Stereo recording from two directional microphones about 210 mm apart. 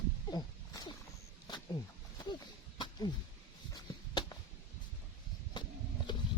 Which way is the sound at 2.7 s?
20° left (ahead or behind).